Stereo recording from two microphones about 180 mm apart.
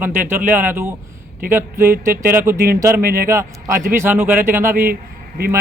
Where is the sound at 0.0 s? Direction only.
10° right (ahead or behind).